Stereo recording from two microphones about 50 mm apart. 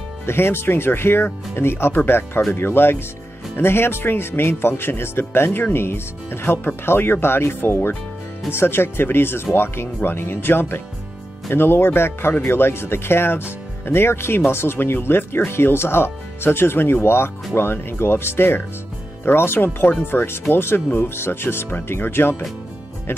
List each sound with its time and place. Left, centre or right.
0.3 s speech: left